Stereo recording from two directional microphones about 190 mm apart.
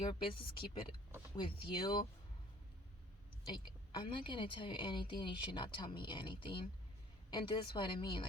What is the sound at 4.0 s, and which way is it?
Speech, 25° left (ahead or behind).